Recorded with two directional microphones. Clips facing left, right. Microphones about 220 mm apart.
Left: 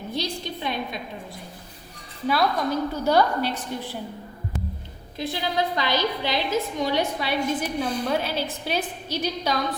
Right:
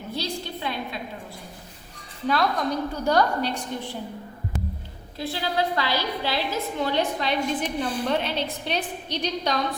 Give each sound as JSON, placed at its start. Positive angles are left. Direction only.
{"t": 0.1, "sound": "a woman's voice", "side_deg": 20}
{"t": 2.2, "sound": "a woman's voice", "side_deg": 5}
{"t": 5.1, "sound": "a woman's voice", "side_deg": 20}